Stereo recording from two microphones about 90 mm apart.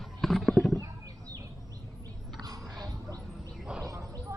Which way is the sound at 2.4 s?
45° right (ahead or behind).